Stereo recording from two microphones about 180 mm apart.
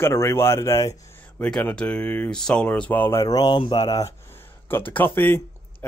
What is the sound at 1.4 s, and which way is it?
Speech, 5° left (ahead or behind).